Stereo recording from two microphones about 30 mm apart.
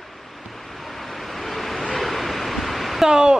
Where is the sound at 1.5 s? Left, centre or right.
Centre.